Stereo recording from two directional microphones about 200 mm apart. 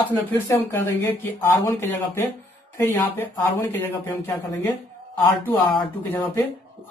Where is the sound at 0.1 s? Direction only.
10° left (ahead or behind).